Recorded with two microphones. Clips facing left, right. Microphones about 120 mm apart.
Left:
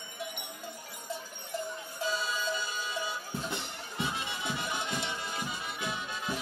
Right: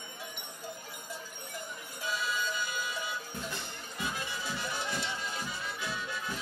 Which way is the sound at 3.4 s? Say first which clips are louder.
Left 3 dB; 25° left (ahead or behind).